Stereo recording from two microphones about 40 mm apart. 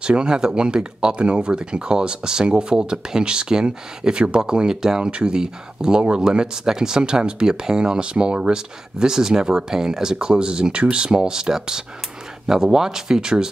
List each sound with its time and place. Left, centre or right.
0.0 s speech: right